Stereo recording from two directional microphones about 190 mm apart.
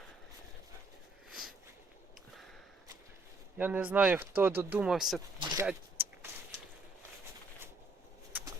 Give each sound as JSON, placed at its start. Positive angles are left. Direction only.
{"t": 1.3, "sound": "sniff", "side_deg": 0}
{"t": 3.6, "sound": "speech", "side_deg": -10}
{"t": 5.4, "sound": "a sound", "side_deg": -20}
{"t": 8.3, "sound": "bird", "side_deg": -10}